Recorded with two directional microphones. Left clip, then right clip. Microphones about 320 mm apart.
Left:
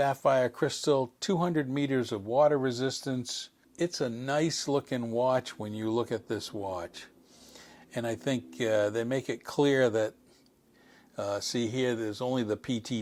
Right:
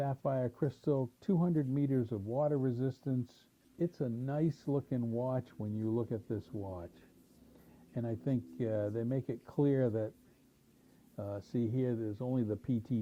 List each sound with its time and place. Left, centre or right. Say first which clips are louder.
0.0 s speech: left 10 dB; centre
5.0 s speech: left 9 dB; left
5.3 s speech: left 10 dB; centre
6.5 s speech: left 9 dB; centre
11.2 s speech: left 8 dB; centre